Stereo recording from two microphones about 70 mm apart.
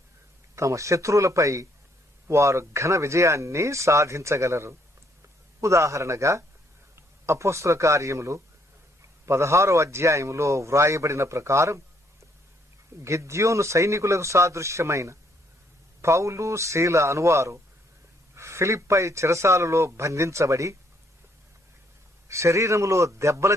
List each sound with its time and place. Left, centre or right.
0.5 s a man's voice: right
13.0 s a man's voice: right
22.3 s a man's voice: right